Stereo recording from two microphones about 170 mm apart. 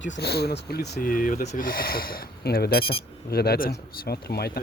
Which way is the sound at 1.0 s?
55° left (ahead or behind).